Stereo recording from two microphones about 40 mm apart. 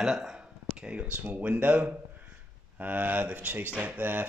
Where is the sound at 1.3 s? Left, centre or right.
Right.